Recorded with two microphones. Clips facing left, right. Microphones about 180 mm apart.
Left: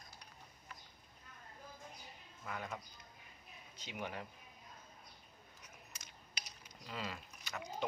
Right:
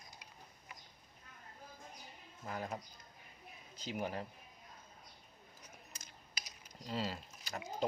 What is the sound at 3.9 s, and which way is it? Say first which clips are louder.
Speech: right 5 dB; 35° right (ahead or behind).